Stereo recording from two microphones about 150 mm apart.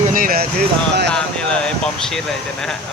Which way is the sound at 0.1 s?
70° right (ahead or behind).